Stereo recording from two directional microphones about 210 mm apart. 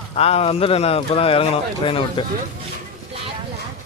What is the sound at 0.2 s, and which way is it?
A man's voice, 30° left (ahead or behind).